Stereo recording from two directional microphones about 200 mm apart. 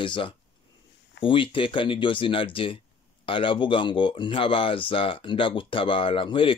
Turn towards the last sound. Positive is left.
turn(degrees=25)  # may be behind; listen again after turning